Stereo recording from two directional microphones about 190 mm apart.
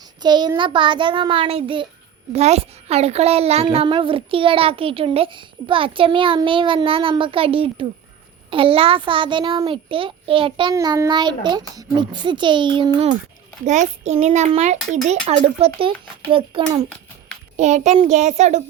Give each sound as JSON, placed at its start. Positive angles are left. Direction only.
{"t": 0.2, "sound": "a child's voice", "side_deg": -20}
{"t": 13.7, "sound": "a child's voice", "side_deg": -35}
{"t": 17.6, "sound": "a child's voice", "side_deg": -35}